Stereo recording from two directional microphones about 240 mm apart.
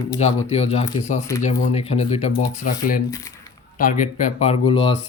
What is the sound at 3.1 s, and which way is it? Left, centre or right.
Speech, centre.